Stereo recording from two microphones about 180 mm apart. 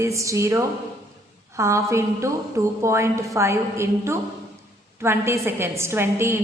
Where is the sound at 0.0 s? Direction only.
15° right (ahead or behind).